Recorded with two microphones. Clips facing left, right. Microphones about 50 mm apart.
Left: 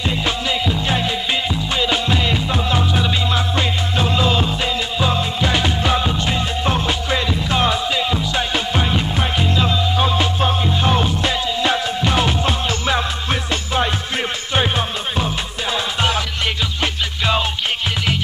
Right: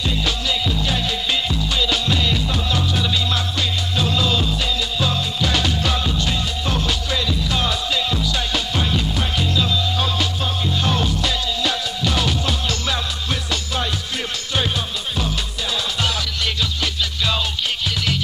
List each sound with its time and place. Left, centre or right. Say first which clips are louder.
0.1 s music: left 2 dB; left